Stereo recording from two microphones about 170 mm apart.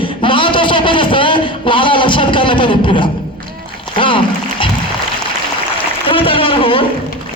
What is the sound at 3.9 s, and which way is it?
Music, 30° left (ahead or behind).